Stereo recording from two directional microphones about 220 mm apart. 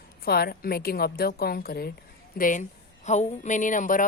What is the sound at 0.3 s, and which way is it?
Speech, 45° left (ahead or behind).